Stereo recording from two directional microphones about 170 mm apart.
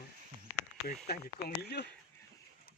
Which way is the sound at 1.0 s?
65° left (ahead or behind).